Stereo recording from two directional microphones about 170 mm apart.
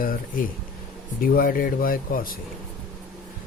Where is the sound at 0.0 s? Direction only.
55° left (ahead or behind).